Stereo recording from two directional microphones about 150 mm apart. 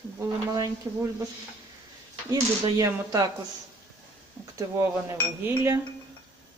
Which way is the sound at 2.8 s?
20° right (ahead or behind).